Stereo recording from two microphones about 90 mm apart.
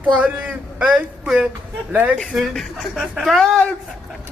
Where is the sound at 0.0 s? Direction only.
15° right (ahead or behind).